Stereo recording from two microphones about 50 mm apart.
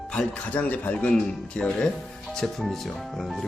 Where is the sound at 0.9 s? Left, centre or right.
Centre.